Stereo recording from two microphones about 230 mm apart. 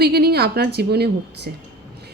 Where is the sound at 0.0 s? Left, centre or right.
Right.